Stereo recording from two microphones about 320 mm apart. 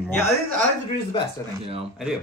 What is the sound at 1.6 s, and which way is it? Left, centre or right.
Speech, centre.